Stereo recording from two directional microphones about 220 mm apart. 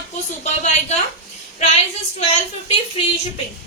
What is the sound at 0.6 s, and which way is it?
Speech, 30° left (ahead or behind).